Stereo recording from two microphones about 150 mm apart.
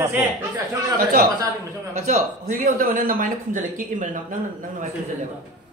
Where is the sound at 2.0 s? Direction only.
70° right (ahead or behind).